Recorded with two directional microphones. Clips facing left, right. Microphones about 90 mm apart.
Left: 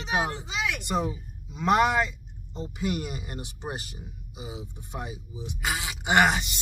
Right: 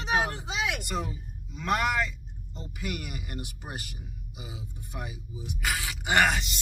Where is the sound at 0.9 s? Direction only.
20° left (ahead or behind).